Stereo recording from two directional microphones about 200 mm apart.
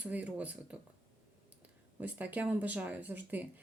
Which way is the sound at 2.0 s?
10° right (ahead or behind).